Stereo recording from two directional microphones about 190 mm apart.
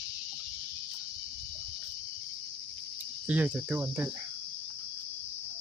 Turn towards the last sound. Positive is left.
turn(degrees=-10)  # may be behind; listen again after turning